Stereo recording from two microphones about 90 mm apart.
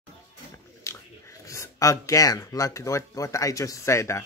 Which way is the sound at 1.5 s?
35° left (ahead or behind).